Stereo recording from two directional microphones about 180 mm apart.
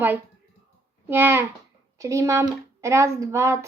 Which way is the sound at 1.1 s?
10° right (ahead or behind).